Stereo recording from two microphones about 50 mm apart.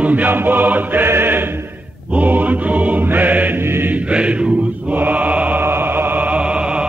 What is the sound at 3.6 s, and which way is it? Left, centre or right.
Mantra, right.